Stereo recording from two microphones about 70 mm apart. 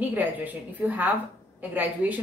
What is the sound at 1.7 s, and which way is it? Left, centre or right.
Speech, right.